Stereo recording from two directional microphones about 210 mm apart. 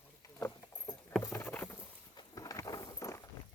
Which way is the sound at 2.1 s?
15° left (ahead or behind).